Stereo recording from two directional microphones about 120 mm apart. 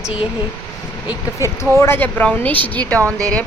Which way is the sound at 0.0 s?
10° right (ahead or behind).